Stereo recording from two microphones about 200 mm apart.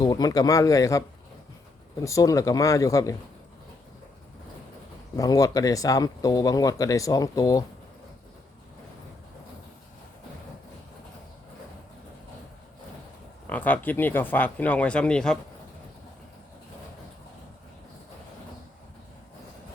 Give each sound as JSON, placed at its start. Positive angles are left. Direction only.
{"t": 0.0, "sound": "speech", "side_deg": 20}
{"t": 5.1, "sound": "speech", "side_deg": 15}
{"t": 13.5, "sound": "speech", "side_deg": 10}